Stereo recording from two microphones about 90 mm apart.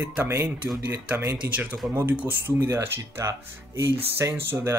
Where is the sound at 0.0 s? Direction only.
20° right (ahead or behind).